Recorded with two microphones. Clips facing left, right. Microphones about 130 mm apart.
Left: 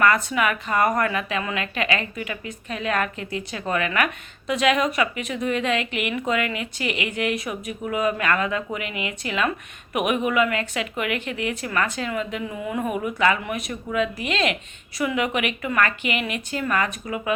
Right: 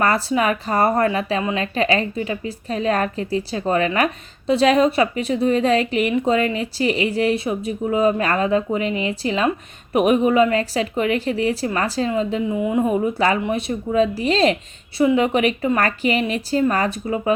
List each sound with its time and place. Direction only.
0.0 s speech: 30° right (ahead or behind)